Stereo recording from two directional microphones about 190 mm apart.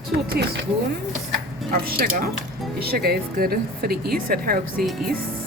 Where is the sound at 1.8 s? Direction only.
50° right (ahead or behind).